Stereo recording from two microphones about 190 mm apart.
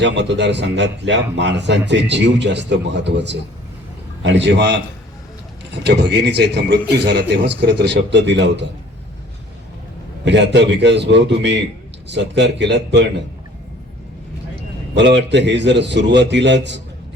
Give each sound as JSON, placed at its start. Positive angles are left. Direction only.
{"t": 0.0, "sound": "a man's voice", "side_deg": -65}
{"t": 5.8, "sound": "speech", "side_deg": -60}
{"t": 10.2, "sound": "a man's voice", "side_deg": -65}
{"t": 14.9, "sound": "a man's voice", "side_deg": -70}